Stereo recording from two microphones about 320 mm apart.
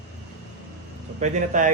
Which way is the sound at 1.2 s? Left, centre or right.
Right.